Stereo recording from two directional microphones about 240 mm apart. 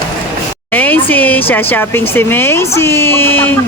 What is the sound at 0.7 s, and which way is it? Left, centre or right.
Speech, centre.